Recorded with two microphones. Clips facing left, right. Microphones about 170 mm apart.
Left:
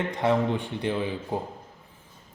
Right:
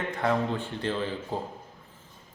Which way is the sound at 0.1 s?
20° left (ahead or behind).